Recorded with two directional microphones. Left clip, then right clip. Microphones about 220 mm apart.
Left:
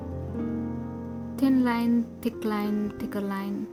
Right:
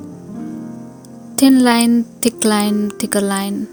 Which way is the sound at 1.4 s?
35° right (ahead or behind).